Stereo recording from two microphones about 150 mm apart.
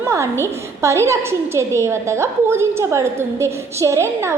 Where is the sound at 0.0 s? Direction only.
20° right (ahead or behind).